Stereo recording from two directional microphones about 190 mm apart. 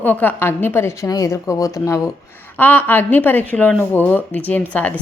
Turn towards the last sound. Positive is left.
turn(degrees=10)  # may be behind; listen again after turning